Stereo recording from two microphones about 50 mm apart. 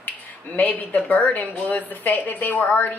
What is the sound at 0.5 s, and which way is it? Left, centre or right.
A woman's voice, left.